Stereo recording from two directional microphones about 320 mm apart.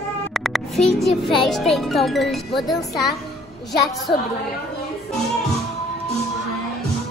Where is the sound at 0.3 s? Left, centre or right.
Centre.